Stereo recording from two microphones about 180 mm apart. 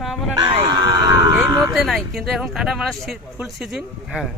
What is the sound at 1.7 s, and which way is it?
Speech, centre (ahead or behind).